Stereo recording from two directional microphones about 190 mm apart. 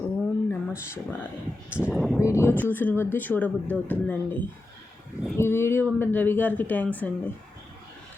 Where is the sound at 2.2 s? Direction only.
15° left (ahead or behind).